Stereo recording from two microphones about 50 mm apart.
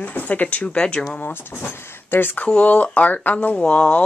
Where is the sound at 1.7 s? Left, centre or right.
Left.